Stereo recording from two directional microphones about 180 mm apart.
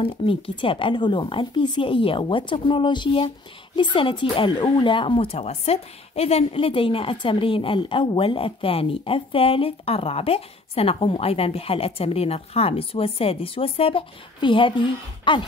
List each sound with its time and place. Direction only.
0.0 s speech: 30° left (ahead or behind)